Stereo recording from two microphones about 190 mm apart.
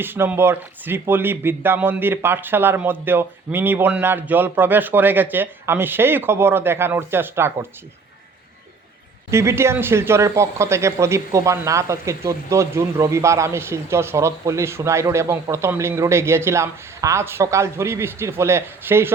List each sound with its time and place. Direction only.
0.0 s speech: 10° right (ahead or behind)
9.3 s speech: 15° right (ahead or behind)